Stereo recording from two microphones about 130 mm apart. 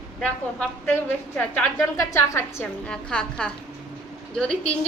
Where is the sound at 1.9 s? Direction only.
25° left (ahead or behind).